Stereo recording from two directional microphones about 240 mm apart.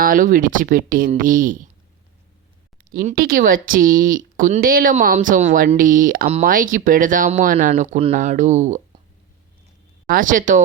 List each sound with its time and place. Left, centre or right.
0.0 s speech: right
2.7 s speech: right
10.1 s speech: right